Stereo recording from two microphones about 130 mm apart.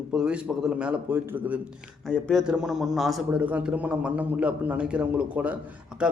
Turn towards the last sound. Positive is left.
turn(degrees=-10)  # may be behind; listen again after turning